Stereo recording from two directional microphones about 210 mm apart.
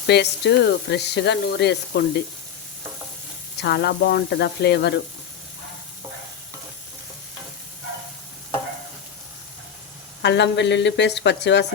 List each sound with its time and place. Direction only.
0.1 s speech: 55° left (ahead or behind)
3.6 s speech: 50° left (ahead or behind)
10.2 s a woman's voice: 55° left (ahead or behind)